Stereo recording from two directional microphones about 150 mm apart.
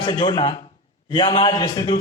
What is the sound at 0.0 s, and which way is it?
A man's voice, 30° left (ahead or behind).